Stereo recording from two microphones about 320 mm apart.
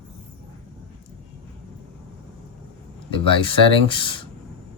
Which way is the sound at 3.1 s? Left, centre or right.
Centre.